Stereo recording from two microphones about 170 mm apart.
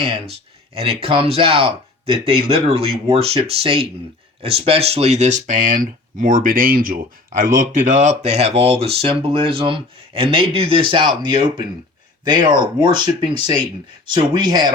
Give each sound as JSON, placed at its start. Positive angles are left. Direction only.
{"t": 0.0, "sound": "speech", "side_deg": -35}